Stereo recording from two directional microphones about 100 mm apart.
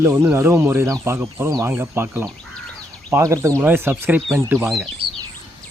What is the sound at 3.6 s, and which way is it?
Speech, 20° right (ahead or behind).